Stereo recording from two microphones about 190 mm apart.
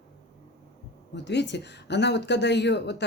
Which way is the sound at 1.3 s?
65° left (ahead or behind).